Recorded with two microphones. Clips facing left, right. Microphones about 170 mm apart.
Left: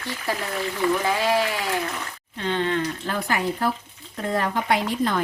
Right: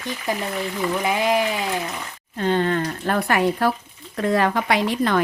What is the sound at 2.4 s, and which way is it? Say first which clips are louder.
Speech: right 3 dB; 45° right (ahead or behind).